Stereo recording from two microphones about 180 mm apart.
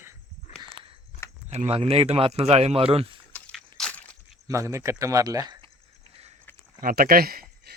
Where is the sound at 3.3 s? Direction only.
5° left (ahead or behind).